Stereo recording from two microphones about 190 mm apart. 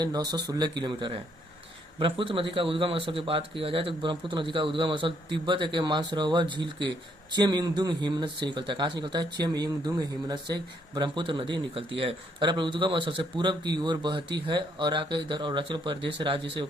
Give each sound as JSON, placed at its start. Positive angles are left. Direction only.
{"t": 0.0, "sound": "speech", "side_deg": -20}